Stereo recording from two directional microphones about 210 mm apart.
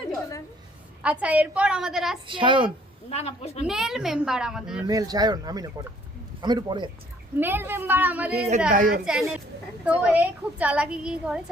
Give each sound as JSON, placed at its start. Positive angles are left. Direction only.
{"t": 1.2, "sound": "a woman's voice", "side_deg": -5}
{"t": 2.2, "sound": "speech", "side_deg": -25}
{"t": 3.1, "sound": "speech", "side_deg": 30}
{"t": 3.7, "sound": "a woman's voice", "side_deg": 0}
{"t": 4.9, "sound": "speech", "side_deg": -20}
{"t": 7.3, "sound": "a woman's voice", "side_deg": -10}
{"t": 8.7, "sound": "a woman's voice", "side_deg": -40}
{"t": 9.0, "sound": "a woman's voice", "side_deg": -5}